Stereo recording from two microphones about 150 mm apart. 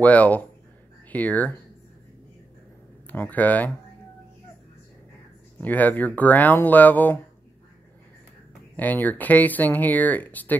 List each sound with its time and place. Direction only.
0.0 s speech: 10° left (ahead or behind)
3.1 s speech: 10° left (ahead or behind)
5.6 s speech: 10° left (ahead or behind)
8.7 s speech: 10° left (ahead or behind)